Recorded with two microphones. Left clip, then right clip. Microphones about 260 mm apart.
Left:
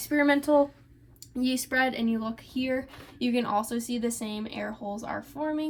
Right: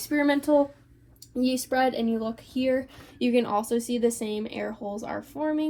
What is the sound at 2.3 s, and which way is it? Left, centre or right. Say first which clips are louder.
Speech: right 4 dB; centre.